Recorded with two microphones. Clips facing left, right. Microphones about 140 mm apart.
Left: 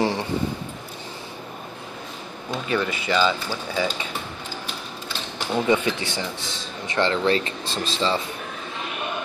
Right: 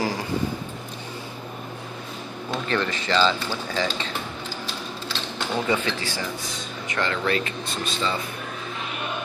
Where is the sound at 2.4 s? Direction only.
10° left (ahead or behind).